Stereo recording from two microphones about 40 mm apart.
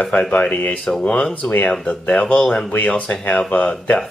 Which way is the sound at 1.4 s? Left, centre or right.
Left.